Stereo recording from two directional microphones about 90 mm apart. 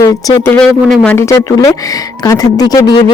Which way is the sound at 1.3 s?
35° left (ahead or behind).